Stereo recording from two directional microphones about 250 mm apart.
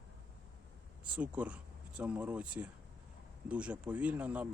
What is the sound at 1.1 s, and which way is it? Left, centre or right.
Speech, centre.